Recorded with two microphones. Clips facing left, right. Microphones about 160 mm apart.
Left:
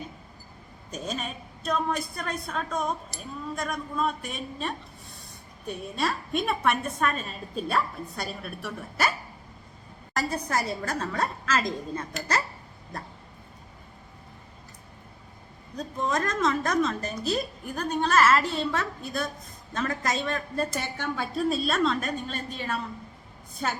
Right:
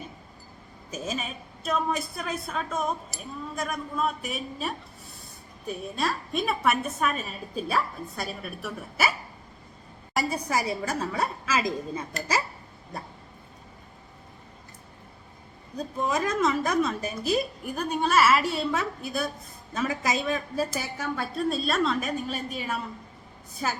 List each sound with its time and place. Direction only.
0.9 s a woman's voice: 5° right (ahead or behind)
10.2 s a woman's voice: 10° right (ahead or behind)
15.7 s a woman's voice: 10° right (ahead or behind)